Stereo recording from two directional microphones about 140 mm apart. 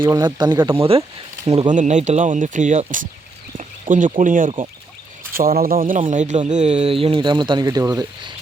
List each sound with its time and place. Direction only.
0.0 s speech: 30° right (ahead or behind)
0.8 s speech: 40° right (ahead or behind)
1.7 s speech: 60° right (ahead or behind)
3.6 s a sound: 65° right (ahead or behind)
4.2 s speech: 70° right (ahead or behind)
5.3 s speech: 90° right
6.1 s speech: 60° right (ahead or behind); by 8.3 s 25° right (ahead or behind)